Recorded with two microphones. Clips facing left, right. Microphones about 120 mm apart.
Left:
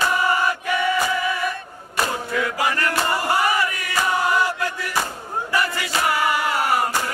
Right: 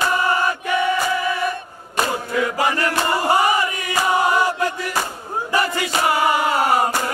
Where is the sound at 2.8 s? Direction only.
15° right (ahead or behind).